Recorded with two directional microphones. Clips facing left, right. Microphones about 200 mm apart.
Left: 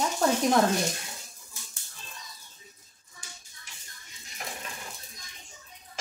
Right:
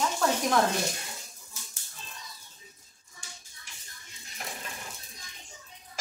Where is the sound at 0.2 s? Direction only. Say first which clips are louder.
Left 3 dB; 40° left (ahead or behind).